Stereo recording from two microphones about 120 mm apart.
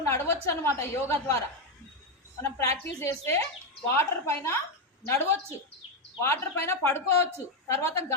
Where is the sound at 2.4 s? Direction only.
25° left (ahead or behind).